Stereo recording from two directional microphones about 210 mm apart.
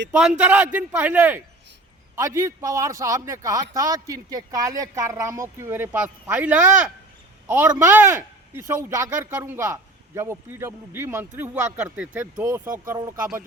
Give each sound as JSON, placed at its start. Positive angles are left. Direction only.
{"t": 0.1, "sound": "speech", "side_deg": -5}